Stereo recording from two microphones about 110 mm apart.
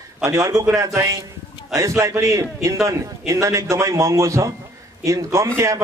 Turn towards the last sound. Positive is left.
turn(degrees=-30)  # may be behind; listen again after turning